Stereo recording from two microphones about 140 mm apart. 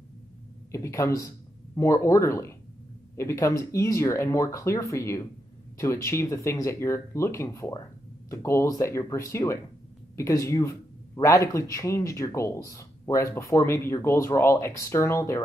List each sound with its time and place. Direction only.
0.7 s speech: 20° left (ahead or behind)